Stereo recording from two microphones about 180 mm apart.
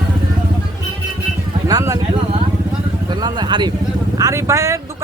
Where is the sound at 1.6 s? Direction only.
20° right (ahead or behind).